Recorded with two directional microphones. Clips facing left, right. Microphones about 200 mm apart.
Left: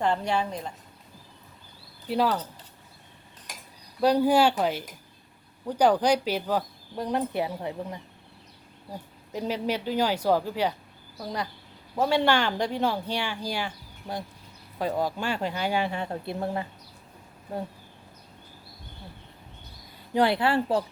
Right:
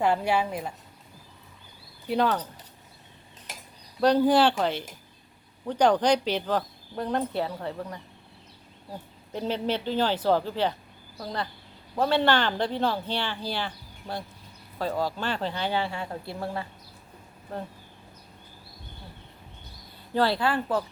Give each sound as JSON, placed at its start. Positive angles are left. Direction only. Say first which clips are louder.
{"t": 0.0, "sound": "speech", "louder": "right 2 dB", "side_deg": -10}
{"t": 2.0, "sound": "speech", "louder": "even", "side_deg": 5}
{"t": 4.0, "sound": "a woman's voice", "louder": "even", "side_deg": 10}
{"t": 11.9, "sound": "a woman's voice", "louder": "even", "side_deg": 10}
{"t": 14.8, "sound": "a woman's voice", "louder": "left 1 dB", "side_deg": 20}
{"t": 20.1, "sound": "speech", "louder": "left 2 dB", "side_deg": 20}